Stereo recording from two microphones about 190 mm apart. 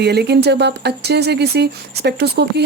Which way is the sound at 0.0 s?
60° right (ahead or behind).